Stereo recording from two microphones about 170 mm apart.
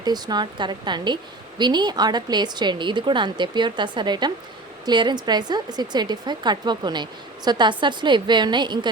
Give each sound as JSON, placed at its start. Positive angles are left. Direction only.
{"t": 0.0, "sound": "a woman's voice", "side_deg": -25}